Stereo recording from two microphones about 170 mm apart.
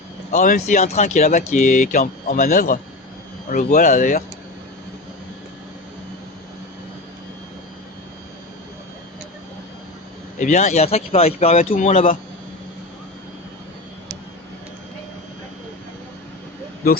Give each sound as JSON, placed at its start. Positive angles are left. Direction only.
{"t": 0.3, "sound": "speech", "side_deg": 45}
{"t": 10.4, "sound": "speech", "side_deg": 40}
{"t": 11.5, "sound": "speech", "side_deg": 50}